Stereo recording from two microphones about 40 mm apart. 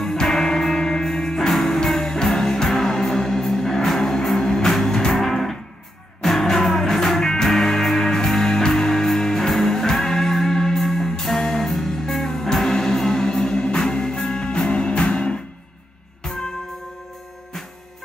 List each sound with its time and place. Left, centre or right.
0.0 s music: centre